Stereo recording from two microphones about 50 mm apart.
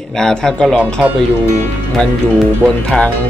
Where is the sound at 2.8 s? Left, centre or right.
Centre.